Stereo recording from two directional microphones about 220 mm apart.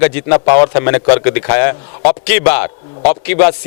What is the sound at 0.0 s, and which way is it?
A man's voice, 15° left (ahead or behind).